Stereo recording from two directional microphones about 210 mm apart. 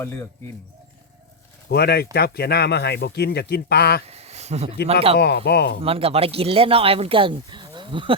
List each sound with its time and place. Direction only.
0.0 s speech: 10° left (ahead or behind)
1.7 s speech: 50° left (ahead or behind)
4.0 s a sound: 30° right (ahead or behind)
5.1 s speech: 50° left (ahead or behind)
5.8 s speech: 25° right (ahead or behind)